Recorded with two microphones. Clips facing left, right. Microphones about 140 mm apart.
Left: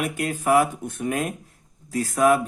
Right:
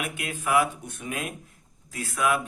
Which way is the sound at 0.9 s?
50° left (ahead or behind).